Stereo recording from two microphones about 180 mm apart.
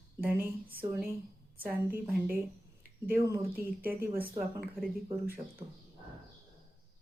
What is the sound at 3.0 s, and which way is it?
Speech, 15° right (ahead or behind).